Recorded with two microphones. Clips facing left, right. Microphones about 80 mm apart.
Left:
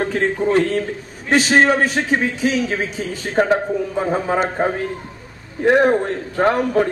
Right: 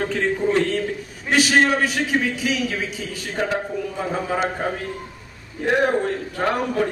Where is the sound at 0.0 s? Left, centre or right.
Left.